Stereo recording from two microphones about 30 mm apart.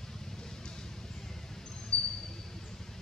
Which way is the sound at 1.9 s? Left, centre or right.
Left.